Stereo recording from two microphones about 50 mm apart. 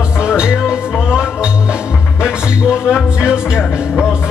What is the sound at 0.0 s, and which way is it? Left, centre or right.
Music, centre.